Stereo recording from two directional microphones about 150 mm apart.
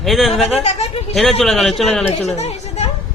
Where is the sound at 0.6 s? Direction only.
45° left (ahead or behind).